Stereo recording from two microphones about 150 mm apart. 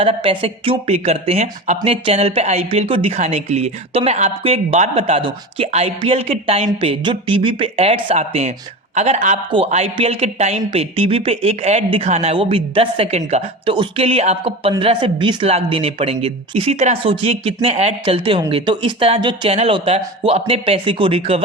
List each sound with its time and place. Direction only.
0.0 s speech: 40° right (ahead or behind)
17.0 s speech: 35° right (ahead or behind)